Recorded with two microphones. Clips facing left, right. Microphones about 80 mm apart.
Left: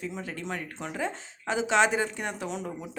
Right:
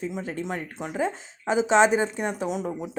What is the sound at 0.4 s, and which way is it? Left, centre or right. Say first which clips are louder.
Speech: right 3 dB; centre.